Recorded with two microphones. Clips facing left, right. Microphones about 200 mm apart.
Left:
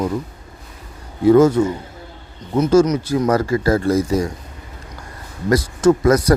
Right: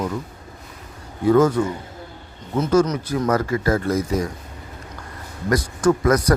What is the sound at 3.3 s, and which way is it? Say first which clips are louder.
Speech: left 2 dB; 35° left (ahead or behind).